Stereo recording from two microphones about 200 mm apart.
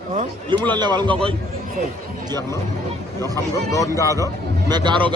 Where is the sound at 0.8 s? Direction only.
20° right (ahead or behind).